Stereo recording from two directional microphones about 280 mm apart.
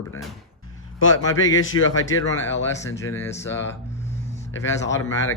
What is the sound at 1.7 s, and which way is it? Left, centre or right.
Speech, left.